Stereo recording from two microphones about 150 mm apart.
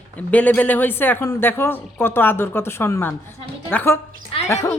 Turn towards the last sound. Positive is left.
turn(degrees=20)  # may be behind; listen again after turning